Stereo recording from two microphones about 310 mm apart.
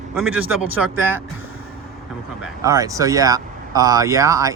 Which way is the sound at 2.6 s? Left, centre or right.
Centre.